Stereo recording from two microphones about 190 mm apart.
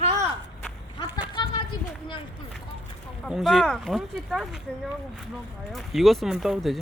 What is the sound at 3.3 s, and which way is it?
Speech, centre (ahead or behind).